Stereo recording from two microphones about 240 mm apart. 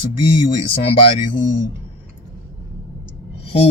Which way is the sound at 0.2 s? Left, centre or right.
Left.